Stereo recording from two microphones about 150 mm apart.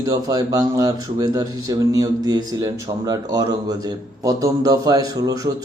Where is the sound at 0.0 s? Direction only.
25° right (ahead or behind).